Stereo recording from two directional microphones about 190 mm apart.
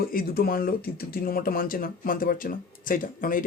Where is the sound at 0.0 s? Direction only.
50° left (ahead or behind).